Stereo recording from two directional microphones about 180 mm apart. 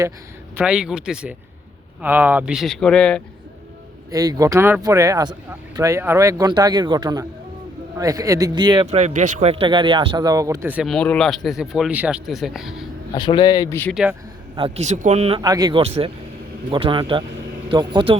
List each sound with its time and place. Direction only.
0.5 s speech: 5° right (ahead or behind)
4.1 s speech: 20° right (ahead or behind)
8.9 s speech: 40° right (ahead or behind); by 10.8 s 10° right (ahead or behind)
10.8 s speech: 5° left (ahead or behind)
13.1 s speech: 25° left (ahead or behind)
13.9 s speech: 5° right (ahead or behind)
14.5 s a man's voice: 35° right (ahead or behind)
15.4 s speech: 20° right (ahead or behind)
15.8 s a man's voice: 30° right (ahead or behind)